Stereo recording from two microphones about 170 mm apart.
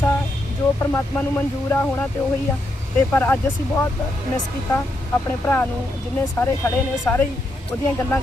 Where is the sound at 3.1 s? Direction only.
10° left (ahead or behind).